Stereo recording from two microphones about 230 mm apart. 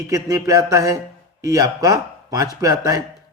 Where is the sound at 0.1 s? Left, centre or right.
Centre.